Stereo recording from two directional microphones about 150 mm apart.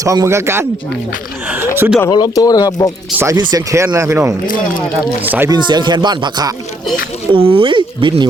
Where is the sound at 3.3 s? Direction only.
25° right (ahead or behind); by 5.5 s 10° right (ahead or behind).